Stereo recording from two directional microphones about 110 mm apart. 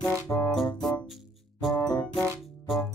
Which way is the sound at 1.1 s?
Centre (ahead or behind).